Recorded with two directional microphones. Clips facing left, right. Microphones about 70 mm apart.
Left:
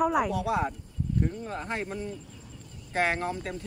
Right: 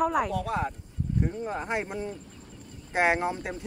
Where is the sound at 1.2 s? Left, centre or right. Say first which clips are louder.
Right 2 dB; centre.